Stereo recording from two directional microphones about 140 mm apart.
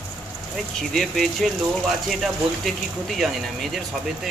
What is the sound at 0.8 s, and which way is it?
Speech, centre (ahead or behind).